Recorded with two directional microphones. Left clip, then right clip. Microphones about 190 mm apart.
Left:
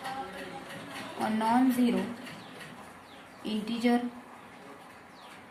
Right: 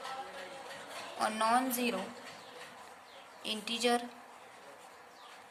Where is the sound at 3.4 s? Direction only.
40° right (ahead or behind).